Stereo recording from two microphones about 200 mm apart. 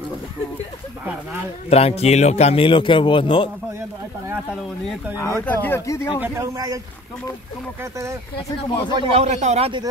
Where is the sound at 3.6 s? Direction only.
15° right (ahead or behind).